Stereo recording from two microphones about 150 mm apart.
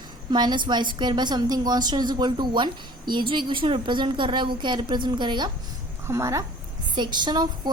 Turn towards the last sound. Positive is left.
turn(degrees=-30)  # may be behind; listen again after turning